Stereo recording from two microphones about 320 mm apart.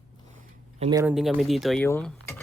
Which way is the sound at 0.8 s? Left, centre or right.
Centre.